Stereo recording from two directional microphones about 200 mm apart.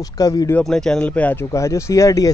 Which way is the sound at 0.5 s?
5° left (ahead or behind).